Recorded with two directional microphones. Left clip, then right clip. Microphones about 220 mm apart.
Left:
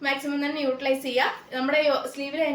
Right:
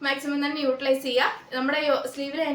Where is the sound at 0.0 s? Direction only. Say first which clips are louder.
Even; 15° right (ahead or behind).